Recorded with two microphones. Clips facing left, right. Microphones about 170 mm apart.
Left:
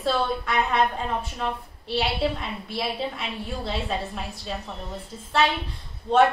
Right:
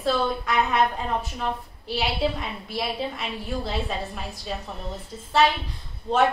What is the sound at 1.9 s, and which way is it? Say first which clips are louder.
A woman's voice: even; centre (ahead or behind).